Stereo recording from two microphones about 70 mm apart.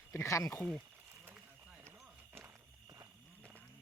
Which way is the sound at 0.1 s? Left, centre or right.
Left.